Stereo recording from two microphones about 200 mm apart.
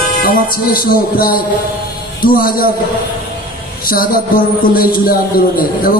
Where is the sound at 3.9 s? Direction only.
45° left (ahead or behind).